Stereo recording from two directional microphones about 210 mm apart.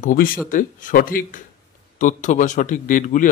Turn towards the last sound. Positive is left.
turn(degrees=40)  # may be behind; listen again after turning